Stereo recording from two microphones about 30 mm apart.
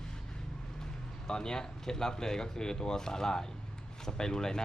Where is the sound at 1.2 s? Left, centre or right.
Left.